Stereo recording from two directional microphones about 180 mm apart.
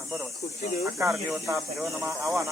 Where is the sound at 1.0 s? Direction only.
15° right (ahead or behind).